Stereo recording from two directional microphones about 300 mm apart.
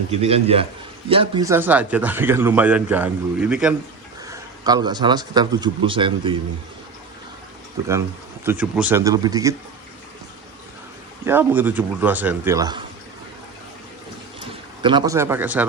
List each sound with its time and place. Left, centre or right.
0.1 s a man's voice: centre
8.4 s speech: centre
11.3 s speech: centre
14.8 s speech: centre